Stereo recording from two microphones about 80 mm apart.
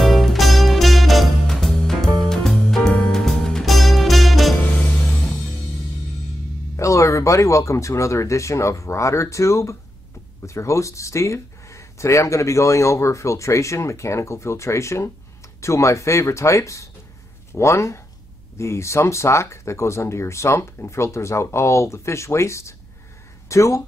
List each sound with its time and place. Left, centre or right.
0.0 s music: centre
6.8 s speech: left